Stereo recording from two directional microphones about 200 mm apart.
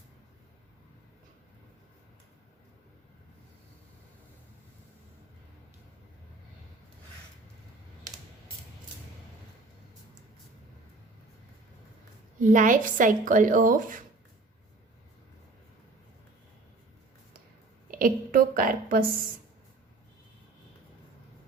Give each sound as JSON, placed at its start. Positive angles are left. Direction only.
{"t": 12.4, "sound": "speech", "side_deg": -40}
{"t": 17.9, "sound": "a woman's voice", "side_deg": -45}